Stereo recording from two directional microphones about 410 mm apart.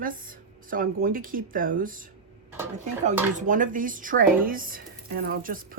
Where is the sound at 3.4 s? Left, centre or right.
Centre.